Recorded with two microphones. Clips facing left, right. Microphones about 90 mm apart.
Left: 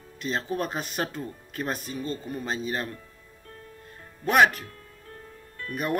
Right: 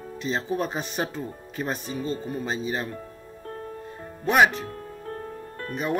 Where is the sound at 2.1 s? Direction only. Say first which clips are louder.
Right 3 dB; 35° right (ahead or behind).